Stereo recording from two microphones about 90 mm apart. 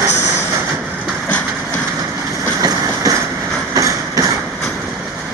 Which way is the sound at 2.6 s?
40° right (ahead or behind).